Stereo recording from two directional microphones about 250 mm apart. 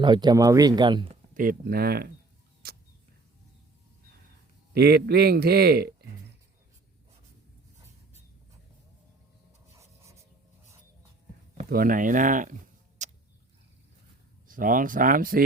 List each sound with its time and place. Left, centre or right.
0.0 s speech: centre
1.3 s a man's voice: right
2.6 s a sound: right
4.7 s a man's voice: right
10.0 s rub: centre
11.5 s a man's voice: right
13.0 s tick-tock: right
14.4 s a man's voice: right